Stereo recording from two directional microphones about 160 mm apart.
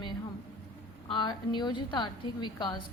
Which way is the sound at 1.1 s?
30° left (ahead or behind).